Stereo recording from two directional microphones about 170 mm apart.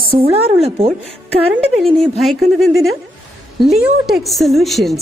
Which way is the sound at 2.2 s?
Centre (ahead or behind).